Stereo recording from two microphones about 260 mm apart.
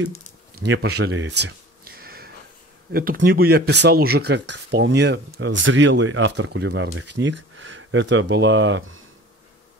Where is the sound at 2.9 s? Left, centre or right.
Right.